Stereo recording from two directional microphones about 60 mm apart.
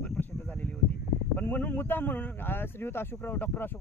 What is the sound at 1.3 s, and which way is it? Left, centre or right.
Speech, left.